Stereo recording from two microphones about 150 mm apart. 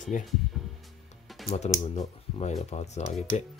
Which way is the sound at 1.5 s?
50° left (ahead or behind).